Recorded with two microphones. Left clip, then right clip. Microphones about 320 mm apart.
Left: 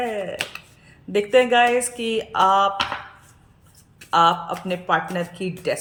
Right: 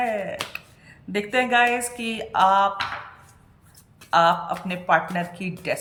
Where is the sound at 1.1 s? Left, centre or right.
Centre.